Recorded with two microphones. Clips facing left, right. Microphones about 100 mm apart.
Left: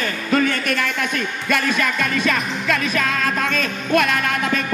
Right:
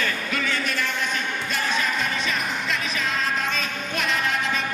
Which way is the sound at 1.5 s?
60° left (ahead or behind).